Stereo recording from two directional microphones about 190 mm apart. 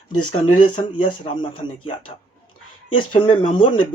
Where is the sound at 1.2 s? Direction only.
25° left (ahead or behind).